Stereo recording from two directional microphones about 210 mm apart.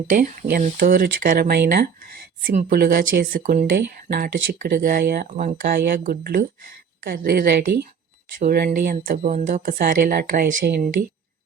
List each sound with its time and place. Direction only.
0.1 s speech: 40° right (ahead or behind)